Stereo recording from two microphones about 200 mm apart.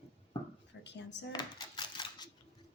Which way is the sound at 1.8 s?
25° left (ahead or behind).